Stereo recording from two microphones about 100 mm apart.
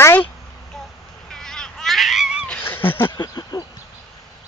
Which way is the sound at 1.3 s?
5° left (ahead or behind).